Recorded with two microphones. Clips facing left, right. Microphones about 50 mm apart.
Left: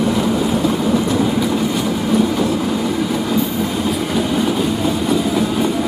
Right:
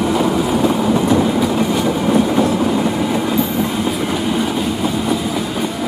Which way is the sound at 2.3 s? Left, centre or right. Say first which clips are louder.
Right 3 dB; right.